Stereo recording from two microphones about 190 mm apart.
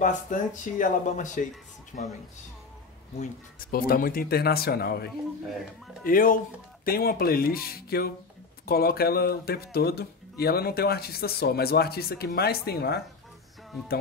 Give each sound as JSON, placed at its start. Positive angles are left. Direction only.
{"t": 0.0, "sound": "speech", "side_deg": 45}
{"t": 3.2, "sound": "speech", "side_deg": 50}